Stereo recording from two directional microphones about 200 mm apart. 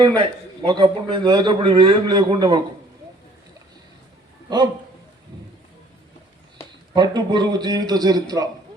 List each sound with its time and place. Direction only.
0.6 s a man's voice: 20° right (ahead or behind)
4.4 s speech: 20° right (ahead or behind)
6.9 s a man's voice: 20° right (ahead or behind)